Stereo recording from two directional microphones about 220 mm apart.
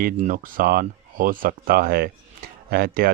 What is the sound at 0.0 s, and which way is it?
Speech, 35° right (ahead or behind).